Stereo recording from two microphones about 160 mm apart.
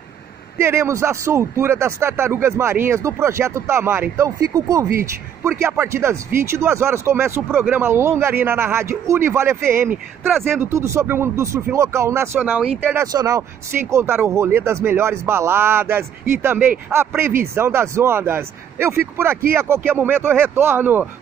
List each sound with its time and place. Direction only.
0.6 s speech: 15° right (ahead or behind)